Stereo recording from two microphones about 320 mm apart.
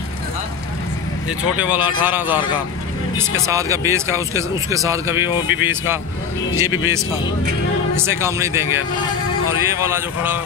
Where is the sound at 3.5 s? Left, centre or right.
Centre.